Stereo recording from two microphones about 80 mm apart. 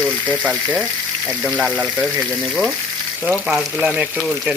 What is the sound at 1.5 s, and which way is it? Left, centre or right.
Speech, centre.